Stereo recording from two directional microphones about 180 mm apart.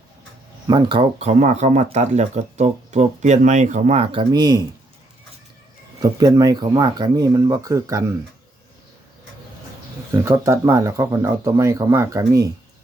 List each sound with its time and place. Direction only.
0.7 s speech: 25° right (ahead or behind)
6.0 s speech: 20° right (ahead or behind)
10.1 s speech: 15° right (ahead or behind)